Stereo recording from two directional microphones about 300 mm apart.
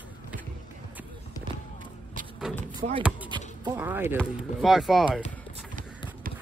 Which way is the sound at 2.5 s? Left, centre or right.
Centre.